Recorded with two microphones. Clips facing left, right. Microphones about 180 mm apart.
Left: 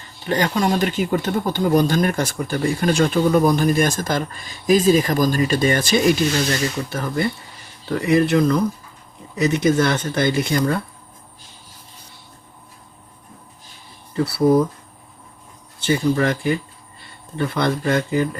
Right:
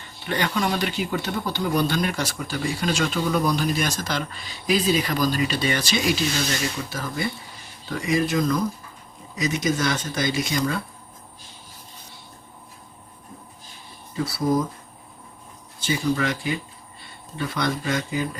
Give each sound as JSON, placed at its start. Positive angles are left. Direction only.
{"t": 0.0, "sound": "speech", "side_deg": 40}
{"t": 14.1, "sound": "speech", "side_deg": 65}
{"t": 16.1, "sound": "speech", "side_deg": 50}